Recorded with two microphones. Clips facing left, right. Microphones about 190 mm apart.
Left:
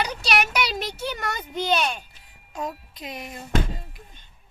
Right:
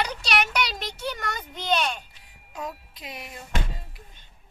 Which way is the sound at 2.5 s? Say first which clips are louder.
Left 3 dB; 5° right (ahead or behind).